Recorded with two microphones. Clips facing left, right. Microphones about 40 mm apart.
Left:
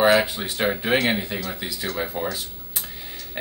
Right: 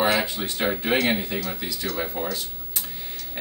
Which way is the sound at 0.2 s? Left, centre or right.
Centre.